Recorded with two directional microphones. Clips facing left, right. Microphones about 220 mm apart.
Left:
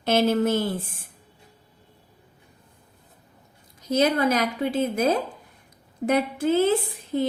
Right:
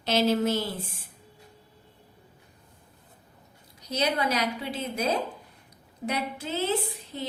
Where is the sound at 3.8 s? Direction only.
50° left (ahead or behind).